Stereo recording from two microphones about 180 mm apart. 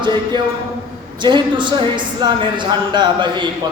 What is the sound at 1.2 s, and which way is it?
A man's voice, 25° right (ahead or behind).